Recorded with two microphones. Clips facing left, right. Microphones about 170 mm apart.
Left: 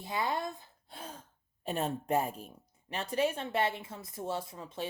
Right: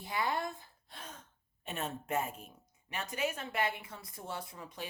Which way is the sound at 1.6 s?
35° left (ahead or behind).